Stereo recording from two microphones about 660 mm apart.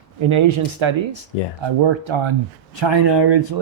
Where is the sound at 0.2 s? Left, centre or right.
Right.